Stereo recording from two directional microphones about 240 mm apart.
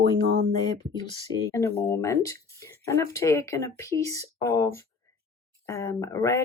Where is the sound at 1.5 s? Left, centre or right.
Centre.